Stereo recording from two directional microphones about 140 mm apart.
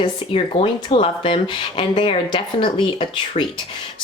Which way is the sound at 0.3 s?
35° left (ahead or behind).